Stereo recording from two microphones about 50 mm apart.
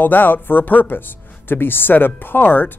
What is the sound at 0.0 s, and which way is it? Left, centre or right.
Speech, left.